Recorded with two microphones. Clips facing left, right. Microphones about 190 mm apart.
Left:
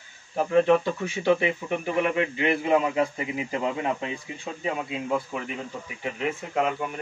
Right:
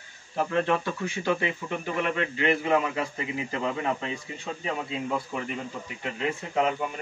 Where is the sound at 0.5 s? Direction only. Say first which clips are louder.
Left 7 dB; 15° left (ahead or behind).